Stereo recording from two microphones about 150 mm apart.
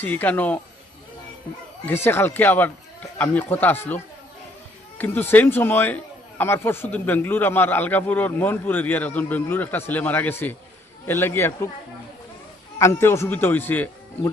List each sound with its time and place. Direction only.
0.0 s a man's voice: 10° left (ahead or behind)
2.0 s a man's voice: 15° left (ahead or behind)
12.8 s a man's voice: 15° left (ahead or behind)